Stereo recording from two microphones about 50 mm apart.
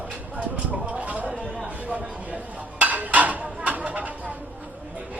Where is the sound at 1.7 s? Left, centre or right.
Right.